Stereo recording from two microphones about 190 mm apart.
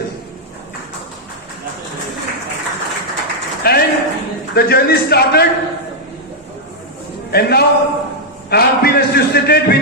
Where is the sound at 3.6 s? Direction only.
55° left (ahead or behind).